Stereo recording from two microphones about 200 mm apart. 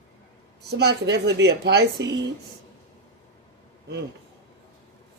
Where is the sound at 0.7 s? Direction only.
55° right (ahead or behind).